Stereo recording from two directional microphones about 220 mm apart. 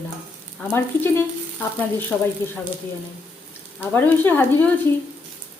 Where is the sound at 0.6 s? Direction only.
10° left (ahead or behind).